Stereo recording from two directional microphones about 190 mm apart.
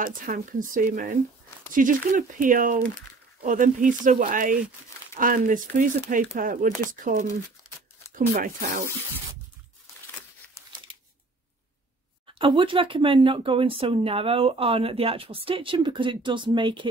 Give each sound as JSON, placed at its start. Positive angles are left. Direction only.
{"t": 0.0, "sound": "speech", "side_deg": -45}
{"t": 12.4, "sound": "speech", "side_deg": -25}